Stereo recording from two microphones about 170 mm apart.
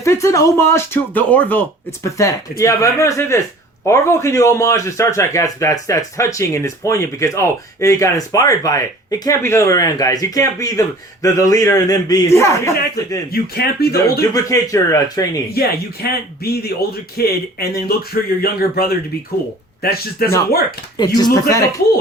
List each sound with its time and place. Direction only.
0.0 s speech: 15° left (ahead or behind)
13.3 s speech: 70° left (ahead or behind)
13.9 s speech: 20° left (ahead or behind)
15.5 s speech: 65° left (ahead or behind)
21.0 s speech: 25° left (ahead or behind)